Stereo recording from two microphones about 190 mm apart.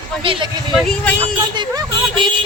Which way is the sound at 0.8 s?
5° left (ahead or behind).